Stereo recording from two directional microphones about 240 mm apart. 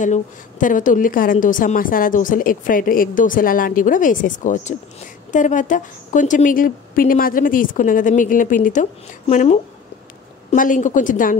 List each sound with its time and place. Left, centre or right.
0.0 s a woman's voice: left